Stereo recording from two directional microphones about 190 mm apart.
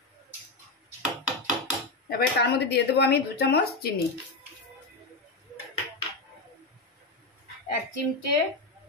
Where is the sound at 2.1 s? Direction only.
55° left (ahead or behind).